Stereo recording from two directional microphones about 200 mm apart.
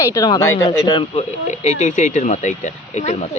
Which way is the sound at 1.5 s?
35° left (ahead or behind).